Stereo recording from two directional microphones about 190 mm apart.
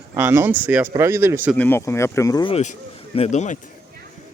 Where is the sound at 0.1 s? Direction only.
15° right (ahead or behind).